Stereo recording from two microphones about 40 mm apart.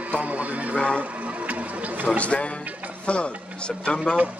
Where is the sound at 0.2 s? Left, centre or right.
Right.